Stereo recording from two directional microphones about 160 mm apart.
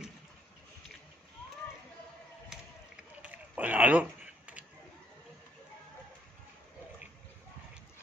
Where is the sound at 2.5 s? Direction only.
5° right (ahead or behind).